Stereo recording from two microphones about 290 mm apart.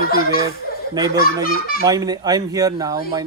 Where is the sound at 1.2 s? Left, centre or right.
Left.